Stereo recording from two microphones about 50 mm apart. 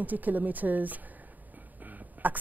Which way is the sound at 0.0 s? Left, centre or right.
Right.